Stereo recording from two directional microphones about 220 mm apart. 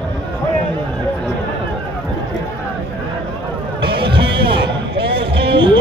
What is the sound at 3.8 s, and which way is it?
Music, 45° right (ahead or behind).